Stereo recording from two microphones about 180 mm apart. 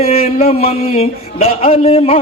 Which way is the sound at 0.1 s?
35° left (ahead or behind).